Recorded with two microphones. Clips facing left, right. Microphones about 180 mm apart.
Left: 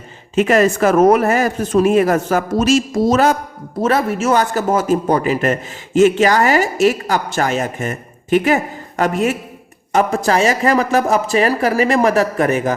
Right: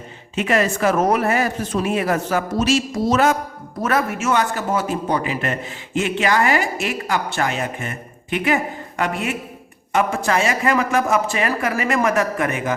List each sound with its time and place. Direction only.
0.3 s speech: 45° left (ahead or behind)
3.8 s a man's voice: 30° left (ahead or behind)